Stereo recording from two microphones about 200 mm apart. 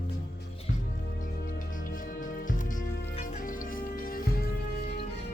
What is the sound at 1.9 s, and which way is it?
Music, 40° left (ahead or behind).